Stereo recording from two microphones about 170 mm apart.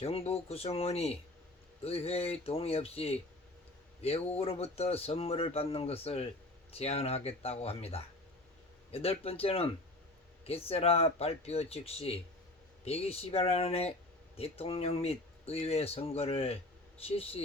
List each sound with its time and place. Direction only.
0.0 s speech: 35° left (ahead or behind)